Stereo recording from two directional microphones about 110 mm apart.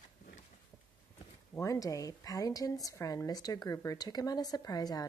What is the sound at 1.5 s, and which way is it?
Speech, 30° left (ahead or behind).